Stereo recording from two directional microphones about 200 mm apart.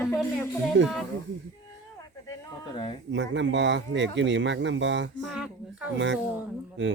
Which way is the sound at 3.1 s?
65° right (ahead or behind).